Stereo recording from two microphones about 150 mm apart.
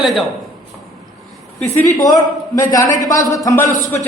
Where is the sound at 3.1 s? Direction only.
20° left (ahead or behind).